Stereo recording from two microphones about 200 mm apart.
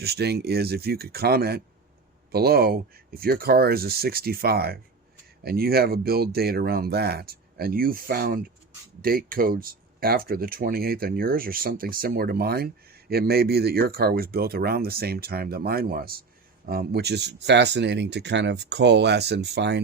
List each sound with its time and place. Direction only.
0.0 s speech: 55° right (ahead or behind)